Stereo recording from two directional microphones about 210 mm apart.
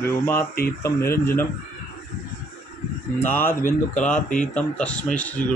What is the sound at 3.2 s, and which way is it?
Speech, 10° left (ahead or behind).